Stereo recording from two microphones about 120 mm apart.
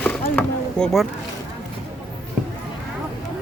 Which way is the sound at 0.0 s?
10° left (ahead or behind).